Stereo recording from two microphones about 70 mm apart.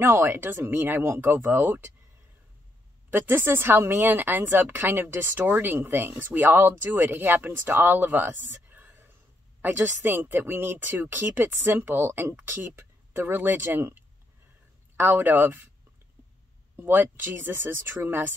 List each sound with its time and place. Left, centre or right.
0.0 s speech: right
3.1 s speech: right
16.7 s speech: right